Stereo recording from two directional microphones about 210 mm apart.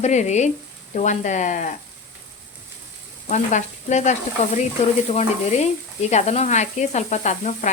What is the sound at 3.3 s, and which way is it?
Sizzle, 35° left (ahead or behind).